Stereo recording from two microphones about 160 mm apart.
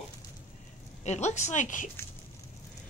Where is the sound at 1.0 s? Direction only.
45° left (ahead or behind).